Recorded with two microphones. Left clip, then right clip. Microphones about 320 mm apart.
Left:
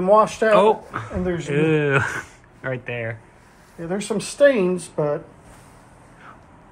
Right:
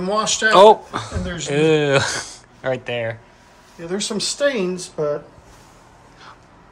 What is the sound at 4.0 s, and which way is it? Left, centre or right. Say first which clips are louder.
Speech: left 4 dB; left.